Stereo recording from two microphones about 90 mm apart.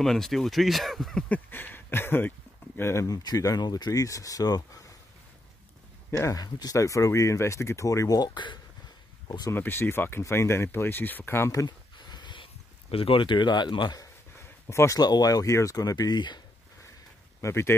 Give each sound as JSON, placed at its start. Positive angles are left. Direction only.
{"t": 0.0, "sound": "speech", "side_deg": 5}
{"t": 1.3, "sound": "speech", "side_deg": 20}
{"t": 3.2, "sound": "speech", "side_deg": 45}
{"t": 6.1, "sound": "speech", "side_deg": 40}
{"t": 9.5, "sound": "speech", "side_deg": 25}
{"t": 11.5, "sound": "a sound", "side_deg": 50}
{"t": 12.9, "sound": "speech", "side_deg": 90}
{"t": 14.7, "sound": "speech", "side_deg": 30}
{"t": 15.0, "sound": "speech", "side_deg": 50}
{"t": 17.4, "sound": "speech", "side_deg": 30}